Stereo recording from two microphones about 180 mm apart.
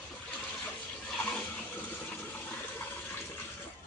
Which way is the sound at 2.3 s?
10° left (ahead or behind).